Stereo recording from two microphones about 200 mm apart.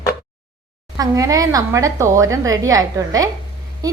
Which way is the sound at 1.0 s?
15° right (ahead or behind).